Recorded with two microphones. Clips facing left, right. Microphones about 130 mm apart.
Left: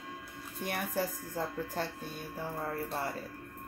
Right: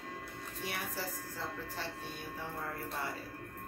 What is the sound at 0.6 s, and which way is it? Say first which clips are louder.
Speech: left 7 dB; 50° left (ahead or behind).